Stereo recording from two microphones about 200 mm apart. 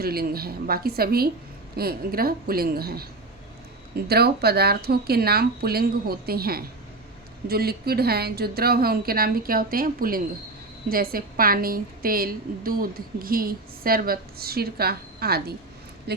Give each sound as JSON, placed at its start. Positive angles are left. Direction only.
{"t": 0.0, "sound": "a woman's voice", "side_deg": -50}